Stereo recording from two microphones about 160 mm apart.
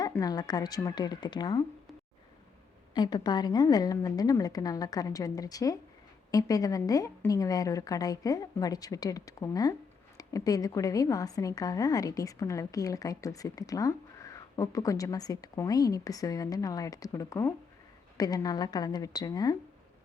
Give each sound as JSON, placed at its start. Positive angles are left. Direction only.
{"t": 0.0, "sound": "a woman's voice", "side_deg": 20}
{"t": 2.9, "sound": "a woman's voice", "side_deg": 25}